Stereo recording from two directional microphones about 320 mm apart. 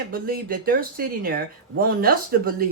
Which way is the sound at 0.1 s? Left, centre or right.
Right.